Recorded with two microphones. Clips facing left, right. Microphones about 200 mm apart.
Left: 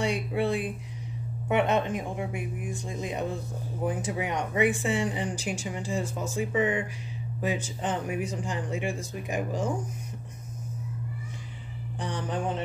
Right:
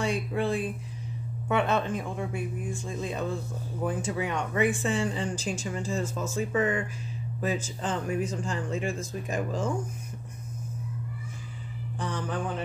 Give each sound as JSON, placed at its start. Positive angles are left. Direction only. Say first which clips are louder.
{"t": 0.0, "sound": "speech", "louder": "left 1 dB", "side_deg": 15}
{"t": 12.0, "sound": "a man's voice", "louder": "left 1 dB", "side_deg": 20}